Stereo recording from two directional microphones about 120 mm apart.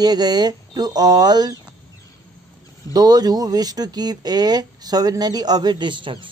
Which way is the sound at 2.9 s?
30° right (ahead or behind).